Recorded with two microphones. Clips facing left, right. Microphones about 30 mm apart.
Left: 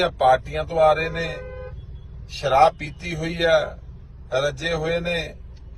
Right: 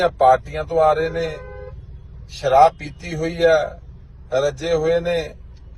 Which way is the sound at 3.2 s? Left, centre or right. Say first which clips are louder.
Right 3 dB; left.